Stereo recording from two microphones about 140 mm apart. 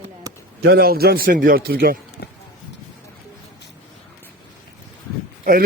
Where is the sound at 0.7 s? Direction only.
90° right.